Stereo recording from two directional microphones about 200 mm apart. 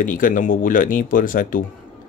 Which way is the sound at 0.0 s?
45° left (ahead or behind).